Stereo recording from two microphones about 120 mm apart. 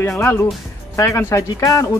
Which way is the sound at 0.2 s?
25° left (ahead or behind).